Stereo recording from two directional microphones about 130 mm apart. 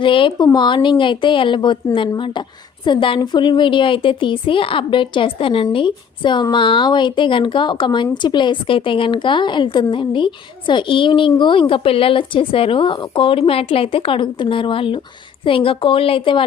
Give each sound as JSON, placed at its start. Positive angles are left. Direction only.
{"t": 0.0, "sound": "a woman's voice", "side_deg": 40}